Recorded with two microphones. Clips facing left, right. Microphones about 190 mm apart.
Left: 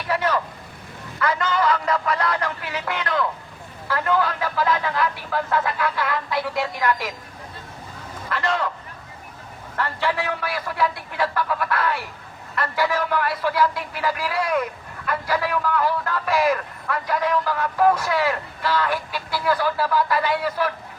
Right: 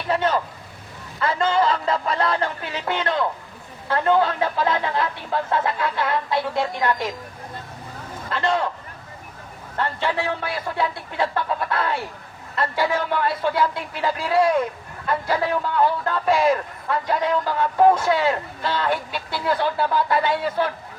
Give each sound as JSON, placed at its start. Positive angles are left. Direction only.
{"t": 0.1, "sound": "vehicle", "side_deg": -25}
{"t": 1.2, "sound": "a man's voice", "side_deg": -25}
{"t": 8.3, "sound": "a man's voice", "side_deg": -25}
{"t": 9.7, "sound": "a man's voice", "side_deg": -25}